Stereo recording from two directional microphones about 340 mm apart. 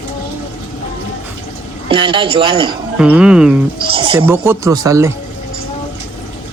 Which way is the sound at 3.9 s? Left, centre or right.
Centre.